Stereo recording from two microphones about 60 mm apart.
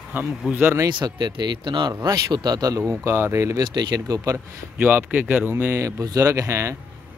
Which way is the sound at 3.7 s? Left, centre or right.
Right.